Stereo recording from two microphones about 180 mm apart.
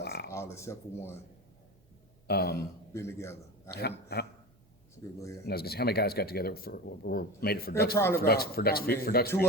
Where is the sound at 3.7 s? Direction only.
60° left (ahead or behind).